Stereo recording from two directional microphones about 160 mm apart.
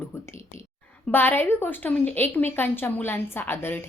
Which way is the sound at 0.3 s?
15° left (ahead or behind).